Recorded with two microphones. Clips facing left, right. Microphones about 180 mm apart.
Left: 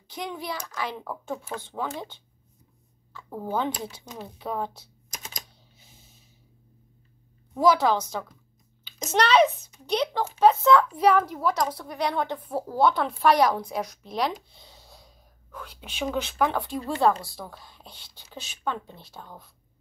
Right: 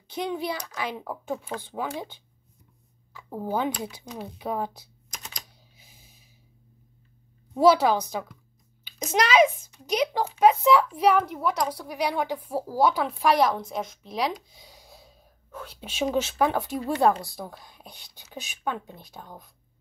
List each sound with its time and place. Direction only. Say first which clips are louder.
0.1 s a child's voice: right 4 dB; 20° right (ahead or behind)
7.5 s a woman's voice: right 2 dB; 15° right (ahead or behind)
8.8 s a sound: left 1 dB; 10° right (ahead or behind)
9.8 s a woman's voice: right 1 dB; 10° right (ahead or behind)
11.3 s a woman's voice: left 1 dB; centre (ahead or behind)
16.1 s a child's voice: right 1 dB; 20° right (ahead or behind)
17.1 s a woman's voice: right 1 dB; centre (ahead or behind)
17.4 s a woman's voice: right 2 dB; 15° right (ahead or behind)